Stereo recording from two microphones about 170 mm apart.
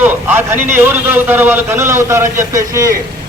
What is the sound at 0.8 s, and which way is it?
A man's voice, 10° right (ahead or behind).